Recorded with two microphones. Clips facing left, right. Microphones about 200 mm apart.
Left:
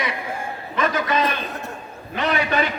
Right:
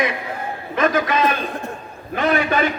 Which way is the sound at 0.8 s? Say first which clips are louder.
Right 3 dB; 50° right (ahead or behind).